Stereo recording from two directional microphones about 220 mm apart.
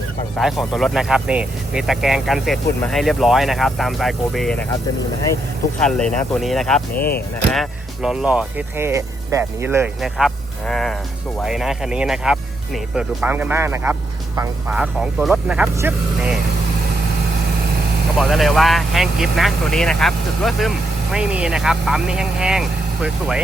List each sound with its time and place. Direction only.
0.3 s speech: centre (ahead or behind)
6.0 s speech: 5° left (ahead or behind)
6.9 s speech: 40° left (ahead or behind)
7.5 s speech: centre (ahead or behind)
18.2 s speech: centre (ahead or behind)